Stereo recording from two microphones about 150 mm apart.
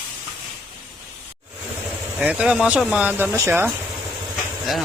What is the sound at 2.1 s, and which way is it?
Speech, 5° right (ahead or behind).